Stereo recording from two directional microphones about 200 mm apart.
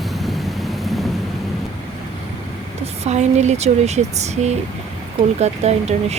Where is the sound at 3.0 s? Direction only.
35° right (ahead or behind).